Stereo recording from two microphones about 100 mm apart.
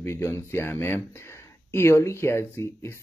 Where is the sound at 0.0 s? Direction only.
30° left (ahead or behind).